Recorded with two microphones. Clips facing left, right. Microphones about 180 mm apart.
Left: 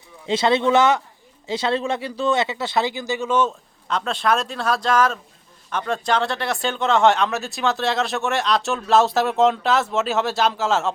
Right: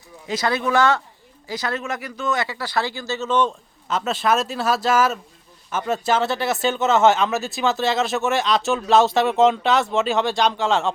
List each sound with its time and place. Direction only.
0.3 s speech: 25° left (ahead or behind); by 3.5 s 10° left (ahead or behind)
3.8 s speech: 5° right (ahead or behind)